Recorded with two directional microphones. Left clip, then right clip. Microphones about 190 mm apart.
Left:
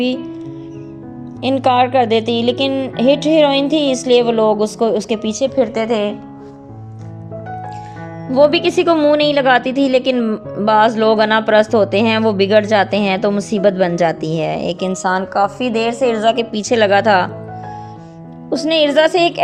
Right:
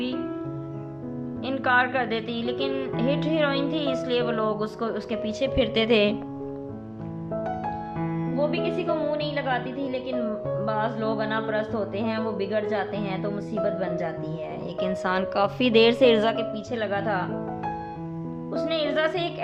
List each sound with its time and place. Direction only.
1.4 s speech: 25° left (ahead or behind)
5.5 s a woman's voice: 20° right (ahead or behind)
8.4 s a woman's voice: 60° left (ahead or behind)
15.3 s a woman's voice: 10° right (ahead or behind)
16.5 s speech: 45° left (ahead or behind)
18.5 s a woman's voice: 40° left (ahead or behind)